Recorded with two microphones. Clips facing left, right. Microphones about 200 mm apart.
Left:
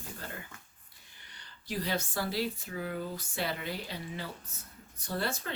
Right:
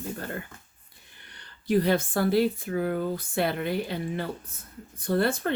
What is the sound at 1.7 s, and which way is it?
Speech, 55° right (ahead or behind).